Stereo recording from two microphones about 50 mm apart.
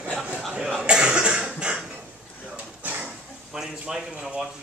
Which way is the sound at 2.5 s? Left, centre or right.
Right.